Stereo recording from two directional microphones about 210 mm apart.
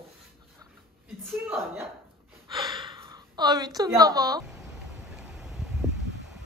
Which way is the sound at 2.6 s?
20° right (ahead or behind).